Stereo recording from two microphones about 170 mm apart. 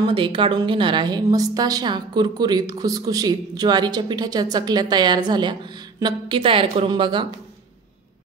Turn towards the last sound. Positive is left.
turn(degrees=-30)  # may be behind; listen again after turning